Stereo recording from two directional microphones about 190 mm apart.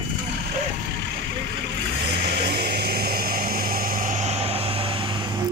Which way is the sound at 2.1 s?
60° right (ahead or behind).